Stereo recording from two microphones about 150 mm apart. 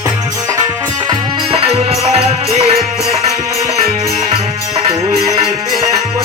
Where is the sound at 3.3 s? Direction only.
25° right (ahead or behind).